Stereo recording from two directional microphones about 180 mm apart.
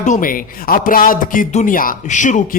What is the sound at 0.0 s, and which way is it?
Speech, 45° left (ahead or behind).